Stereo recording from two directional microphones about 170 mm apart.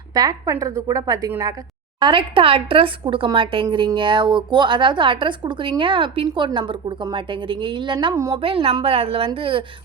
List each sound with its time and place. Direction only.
0.1 s speech: 20° right (ahead or behind)
2.0 s a woman's voice: 30° right (ahead or behind)
8.4 s a woman's voice: 35° right (ahead or behind)